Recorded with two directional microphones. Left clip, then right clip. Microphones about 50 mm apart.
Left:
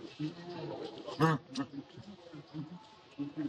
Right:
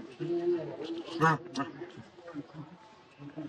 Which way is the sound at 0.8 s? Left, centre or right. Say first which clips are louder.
Right 2 dB; right.